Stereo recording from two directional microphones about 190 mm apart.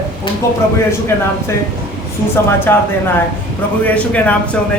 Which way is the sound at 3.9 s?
10° left (ahead or behind).